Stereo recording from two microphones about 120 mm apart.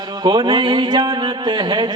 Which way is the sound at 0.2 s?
40° right (ahead or behind).